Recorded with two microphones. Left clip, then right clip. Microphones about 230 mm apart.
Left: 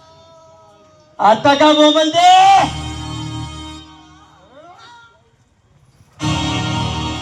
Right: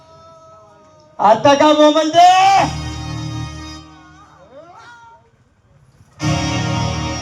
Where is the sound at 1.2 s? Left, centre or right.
Right.